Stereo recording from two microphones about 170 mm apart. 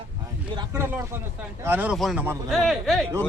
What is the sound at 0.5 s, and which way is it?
Speech, 15° right (ahead or behind).